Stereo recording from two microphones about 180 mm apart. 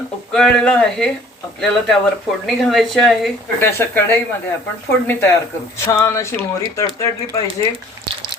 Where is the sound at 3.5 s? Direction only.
10° left (ahead or behind).